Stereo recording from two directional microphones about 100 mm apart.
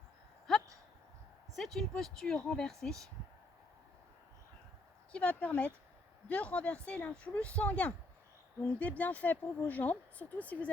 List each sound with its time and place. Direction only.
1.5 s speech: 5° left (ahead or behind)
5.1 s speech: 15° left (ahead or behind)